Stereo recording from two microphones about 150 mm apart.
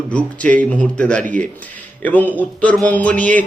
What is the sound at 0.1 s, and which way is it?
Speech, 10° left (ahead or behind).